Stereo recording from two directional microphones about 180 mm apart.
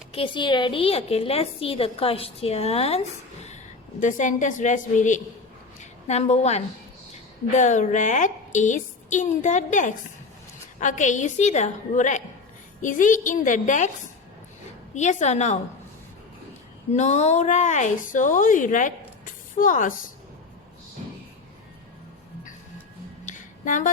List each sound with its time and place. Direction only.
0.1 s a woman's voice: 30° left (ahead or behind)
4.0 s a woman's voice: 45° left (ahead or behind)
14.9 s a woman's voice: 40° left (ahead or behind)
16.9 s speech: 40° left (ahead or behind)
23.2 s a sound: 45° left (ahead or behind)